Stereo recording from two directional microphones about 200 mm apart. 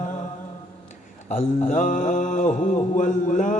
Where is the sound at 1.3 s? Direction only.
40° left (ahead or behind).